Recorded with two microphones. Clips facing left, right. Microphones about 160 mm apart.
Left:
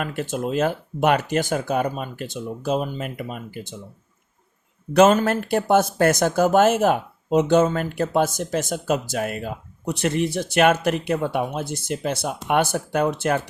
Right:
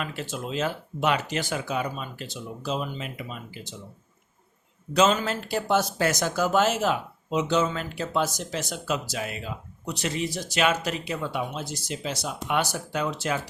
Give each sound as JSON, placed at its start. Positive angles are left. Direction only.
{"t": 0.0, "sound": "speech", "side_deg": 50}
{"t": 4.9, "sound": "speech", "side_deg": 55}